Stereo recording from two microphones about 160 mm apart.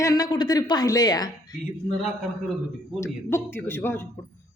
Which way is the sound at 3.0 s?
15° left (ahead or behind).